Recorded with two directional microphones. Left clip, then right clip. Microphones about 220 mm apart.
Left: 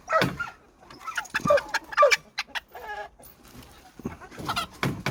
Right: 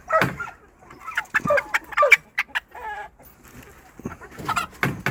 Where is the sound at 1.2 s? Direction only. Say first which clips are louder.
Right 7 dB; 15° left (ahead or behind).